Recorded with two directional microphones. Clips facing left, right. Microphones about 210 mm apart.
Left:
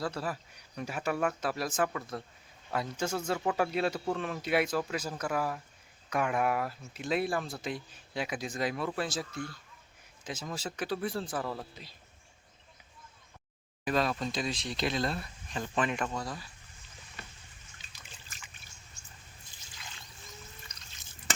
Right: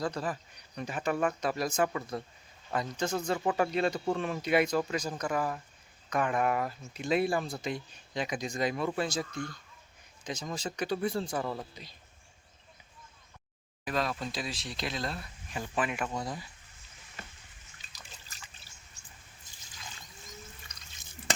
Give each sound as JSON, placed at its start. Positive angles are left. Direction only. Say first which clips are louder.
{"t": 0.0, "sound": "speech", "louder": "right 2 dB", "side_deg": 5}
{"t": 13.8, "sound": "speech", "louder": "left 3 dB", "side_deg": 0}
{"t": 16.1, "sound": "speech", "louder": "right 1 dB", "side_deg": -20}
{"t": 17.9, "sound": "trickle", "louder": "right 2 dB", "side_deg": -35}